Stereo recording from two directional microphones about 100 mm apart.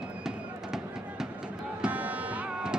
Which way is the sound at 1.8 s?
15° right (ahead or behind).